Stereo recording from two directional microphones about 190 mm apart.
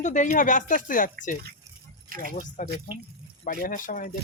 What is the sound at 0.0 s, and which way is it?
Speech, 40° left (ahead or behind).